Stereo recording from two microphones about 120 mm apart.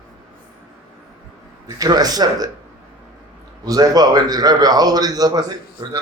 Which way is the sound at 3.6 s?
30° right (ahead or behind).